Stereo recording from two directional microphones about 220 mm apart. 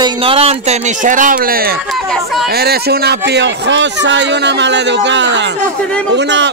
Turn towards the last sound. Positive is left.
turn(degrees=-55)  # may be behind; listen again after turning